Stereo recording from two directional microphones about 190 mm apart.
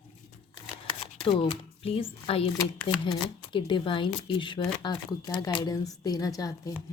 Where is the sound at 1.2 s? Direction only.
25° left (ahead or behind).